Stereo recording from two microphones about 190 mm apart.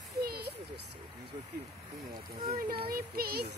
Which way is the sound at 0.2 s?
55° right (ahead or behind).